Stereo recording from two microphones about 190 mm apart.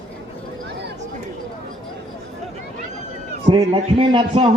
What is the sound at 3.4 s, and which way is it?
A man's voice, 25° right (ahead or behind).